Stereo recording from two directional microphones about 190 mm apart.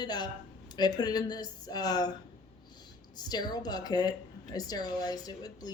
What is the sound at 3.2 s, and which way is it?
Speech, 20° left (ahead or behind).